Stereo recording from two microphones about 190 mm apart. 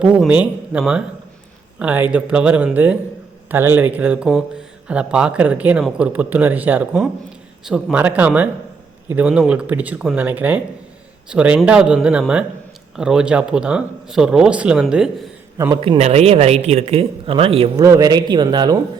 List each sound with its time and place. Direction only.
0.0 s speech: 5° right (ahead or behind)
15.5 s a man's voice: 15° right (ahead or behind)
15.8 s speech: 30° right (ahead or behind)
17.8 s a man's voice: 20° right (ahead or behind)